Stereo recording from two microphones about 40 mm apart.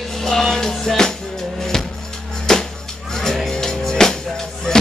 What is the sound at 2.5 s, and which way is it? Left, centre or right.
Music, centre.